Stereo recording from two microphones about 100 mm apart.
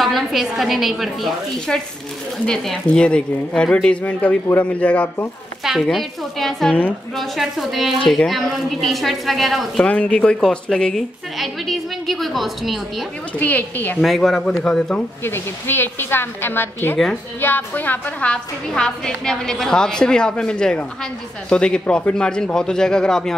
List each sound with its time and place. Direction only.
0.0 s a woman's voice: centre (ahead or behind)
5.6 s a woman's voice: centre (ahead or behind)
9.8 s a woman's voice: 10° left (ahead or behind)
13.4 s a woman's voice: 15° left (ahead or behind)
14.0 s a woman's voice: centre (ahead or behind)
15.2 s a woman's voice: 25° left (ahead or behind); by 23.3 s 5° left (ahead or behind)